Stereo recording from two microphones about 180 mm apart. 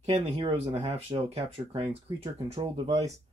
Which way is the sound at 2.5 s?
20° right (ahead or behind).